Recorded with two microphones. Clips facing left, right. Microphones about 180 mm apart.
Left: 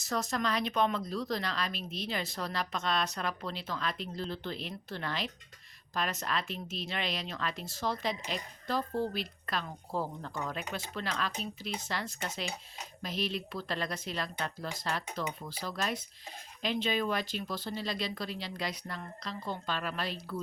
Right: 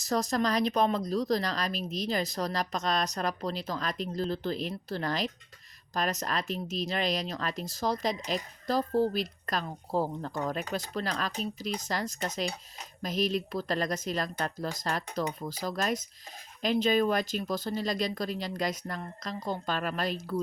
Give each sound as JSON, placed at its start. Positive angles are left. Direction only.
{"t": 0.0, "sound": "speech", "side_deg": -35}